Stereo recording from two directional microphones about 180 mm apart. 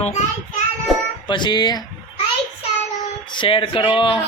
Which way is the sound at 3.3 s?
30° left (ahead or behind).